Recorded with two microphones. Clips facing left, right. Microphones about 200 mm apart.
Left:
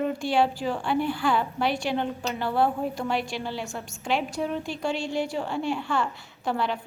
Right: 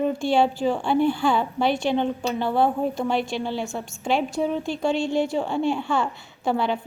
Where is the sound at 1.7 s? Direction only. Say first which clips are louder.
Right 5 dB; 25° right (ahead or behind).